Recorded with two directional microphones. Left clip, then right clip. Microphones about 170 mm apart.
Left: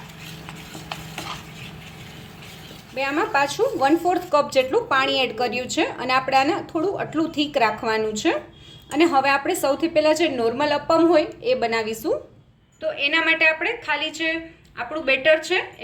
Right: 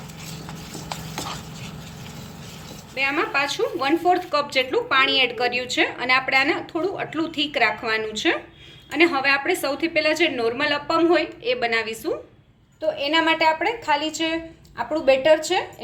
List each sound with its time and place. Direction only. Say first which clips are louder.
2.9 s speech: even; 40° left (ahead or behind)
12.8 s a woman's voice: even; 40° right (ahead or behind)